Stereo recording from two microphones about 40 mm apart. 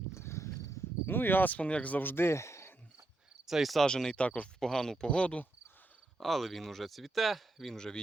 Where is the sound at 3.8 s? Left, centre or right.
Centre.